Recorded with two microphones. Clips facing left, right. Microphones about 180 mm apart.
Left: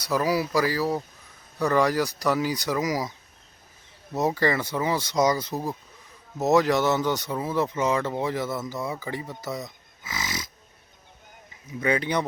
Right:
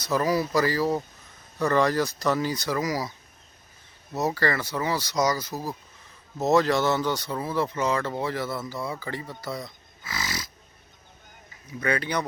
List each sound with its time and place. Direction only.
0.1 s speech: 5° left (ahead or behind)
4.3 s speech: 15° left (ahead or behind)
11.8 s speech: 20° left (ahead or behind)